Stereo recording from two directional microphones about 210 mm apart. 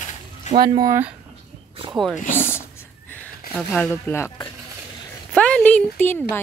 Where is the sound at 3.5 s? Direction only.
5° left (ahead or behind).